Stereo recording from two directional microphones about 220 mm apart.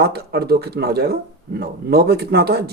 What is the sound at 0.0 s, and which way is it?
Speech, 45° right (ahead or behind).